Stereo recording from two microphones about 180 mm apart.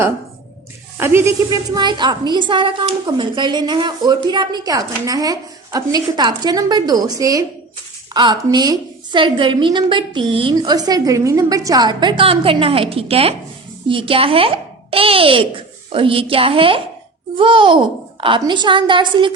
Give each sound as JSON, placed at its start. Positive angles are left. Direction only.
{"t": 0.9, "sound": "a woman's voice", "side_deg": -15}